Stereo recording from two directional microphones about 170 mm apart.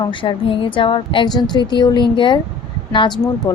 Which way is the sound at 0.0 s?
30° left (ahead or behind).